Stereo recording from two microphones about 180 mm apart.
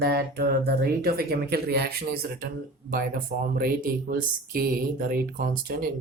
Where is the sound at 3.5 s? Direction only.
55° right (ahead or behind).